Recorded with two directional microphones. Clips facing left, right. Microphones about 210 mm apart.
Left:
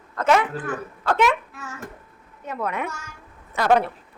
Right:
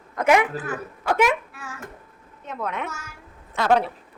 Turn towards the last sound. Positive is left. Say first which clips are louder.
# left 1 dB
turn(degrees=5)  # may be behind; listen again after turning